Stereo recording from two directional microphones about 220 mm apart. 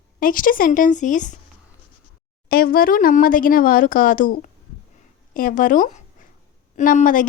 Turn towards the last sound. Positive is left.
turn(degrees=35)  # may be behind; listen again after turning